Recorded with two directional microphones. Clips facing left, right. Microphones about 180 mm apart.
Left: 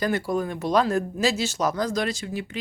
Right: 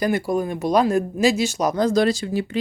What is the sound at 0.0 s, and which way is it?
Speech, 15° right (ahead or behind).